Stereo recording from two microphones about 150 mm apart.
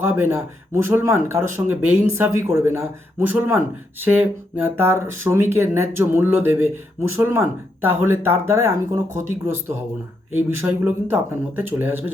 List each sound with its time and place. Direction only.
0.0 s speech: 15° right (ahead or behind)